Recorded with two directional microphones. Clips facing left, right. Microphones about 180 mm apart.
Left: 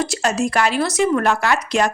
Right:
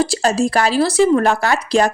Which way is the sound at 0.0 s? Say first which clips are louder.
Right 4 dB; 30° right (ahead or behind).